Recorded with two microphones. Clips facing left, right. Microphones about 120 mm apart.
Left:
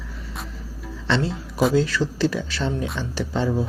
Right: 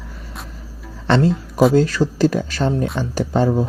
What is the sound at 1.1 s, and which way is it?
Speech, 50° right (ahead or behind).